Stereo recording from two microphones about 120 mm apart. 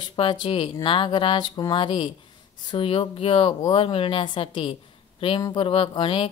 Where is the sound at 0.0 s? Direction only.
40° left (ahead or behind).